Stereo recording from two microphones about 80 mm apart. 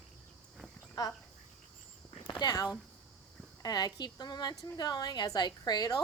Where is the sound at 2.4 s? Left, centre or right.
Left.